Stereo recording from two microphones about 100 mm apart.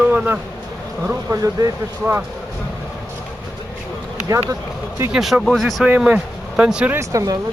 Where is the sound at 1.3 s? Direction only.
35° right (ahead or behind).